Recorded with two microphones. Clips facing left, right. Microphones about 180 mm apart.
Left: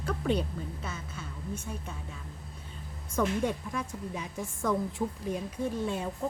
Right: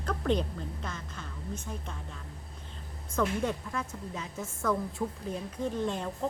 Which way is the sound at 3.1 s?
15° left (ahead or behind).